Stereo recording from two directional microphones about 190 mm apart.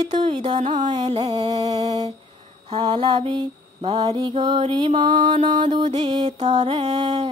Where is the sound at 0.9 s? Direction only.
35° right (ahead or behind).